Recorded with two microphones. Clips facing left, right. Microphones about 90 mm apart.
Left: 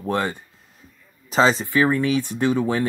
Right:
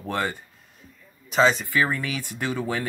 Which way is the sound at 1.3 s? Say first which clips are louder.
Left 2 dB; 35° left (ahead or behind).